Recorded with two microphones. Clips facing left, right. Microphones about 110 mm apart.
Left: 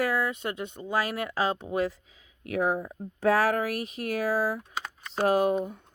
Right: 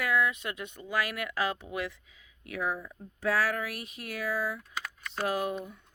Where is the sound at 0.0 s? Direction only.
35° left (ahead or behind).